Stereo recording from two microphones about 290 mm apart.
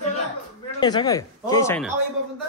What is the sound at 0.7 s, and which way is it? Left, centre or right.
A man's voice, centre.